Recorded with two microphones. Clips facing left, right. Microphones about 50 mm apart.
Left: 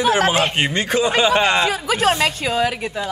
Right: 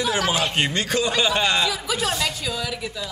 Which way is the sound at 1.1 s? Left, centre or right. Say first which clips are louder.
Left 6 dB; left.